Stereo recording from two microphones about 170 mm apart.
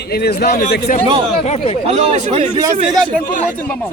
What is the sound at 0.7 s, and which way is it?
Speech, 55° left (ahead or behind).